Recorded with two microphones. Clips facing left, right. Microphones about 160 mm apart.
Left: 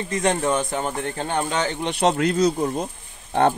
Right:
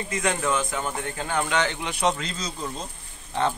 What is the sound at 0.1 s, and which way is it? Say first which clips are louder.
Speech: left 4 dB; 35° left (ahead or behind).